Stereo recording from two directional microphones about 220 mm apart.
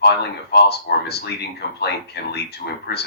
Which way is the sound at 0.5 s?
45° left (ahead or behind).